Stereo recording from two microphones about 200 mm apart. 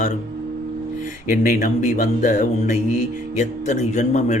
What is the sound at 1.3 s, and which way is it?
Speech, 40° left (ahead or behind).